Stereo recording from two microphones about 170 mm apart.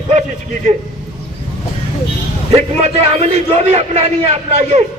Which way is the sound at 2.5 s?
35° right (ahead or behind).